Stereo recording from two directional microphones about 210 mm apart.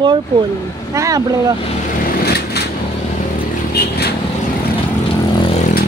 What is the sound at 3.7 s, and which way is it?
Vehicle, 50° left (ahead or behind).